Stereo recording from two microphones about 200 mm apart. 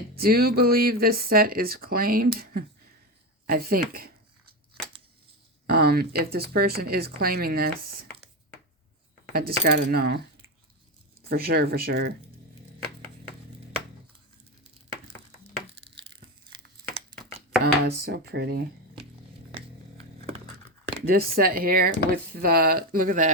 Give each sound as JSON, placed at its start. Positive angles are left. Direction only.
{"t": 0.2, "sound": "speech", "side_deg": -50}
{"t": 3.4, "sound": "a sound", "side_deg": -50}
{"t": 5.6, "sound": "speech", "side_deg": -50}
{"t": 9.3, "sound": "speech", "side_deg": -50}
{"t": 11.2, "sound": "speech", "side_deg": -50}
{"t": 15.7, "sound": "crushing", "side_deg": -55}
{"t": 17.6, "sound": "speech", "side_deg": -50}
{"t": 20.2, "sound": "a sound", "side_deg": -30}
{"t": 21.1, "sound": "speech", "side_deg": -50}